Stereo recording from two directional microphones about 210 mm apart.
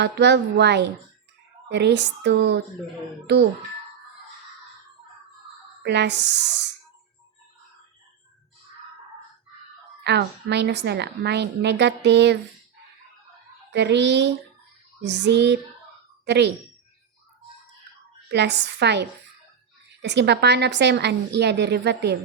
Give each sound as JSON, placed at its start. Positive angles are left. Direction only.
{"t": 0.0, "sound": "a woman's voice", "side_deg": -55}
{"t": 5.8, "sound": "speech", "side_deg": -55}
{"t": 10.0, "sound": "a woman's voice", "side_deg": -55}
{"t": 13.7, "sound": "speech", "side_deg": -55}
{"t": 18.3, "sound": "a woman's voice", "side_deg": -55}